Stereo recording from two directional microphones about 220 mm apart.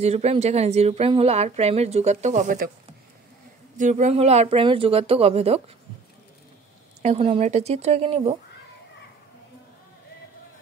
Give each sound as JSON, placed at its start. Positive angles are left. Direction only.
{"t": 0.0, "sound": "a woman's voice", "side_deg": -30}
{"t": 3.7, "sound": "a woman's voice", "side_deg": -35}
{"t": 7.0, "sound": "a woman's voice", "side_deg": -30}